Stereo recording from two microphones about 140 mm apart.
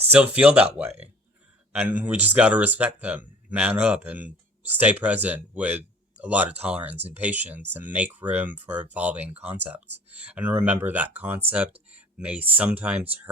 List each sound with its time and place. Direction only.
0.1 s speech: 10° right (ahead or behind)
11.9 s a sound: 10° right (ahead or behind)
12.5 s speech: 10° right (ahead or behind)